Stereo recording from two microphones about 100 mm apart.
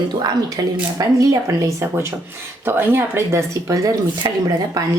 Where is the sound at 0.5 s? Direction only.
35° right (ahead or behind).